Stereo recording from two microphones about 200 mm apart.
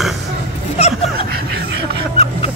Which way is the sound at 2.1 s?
30° left (ahead or behind).